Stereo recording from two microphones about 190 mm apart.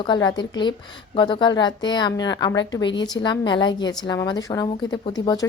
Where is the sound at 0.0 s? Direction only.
25° left (ahead or behind).